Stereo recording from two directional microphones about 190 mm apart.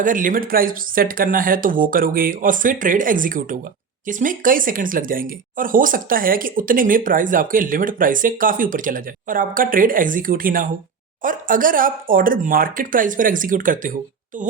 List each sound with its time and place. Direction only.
0.0 s speech: 45° right (ahead or behind)